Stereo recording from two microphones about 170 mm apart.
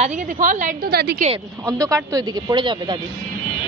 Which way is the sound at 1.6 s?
20° right (ahead or behind).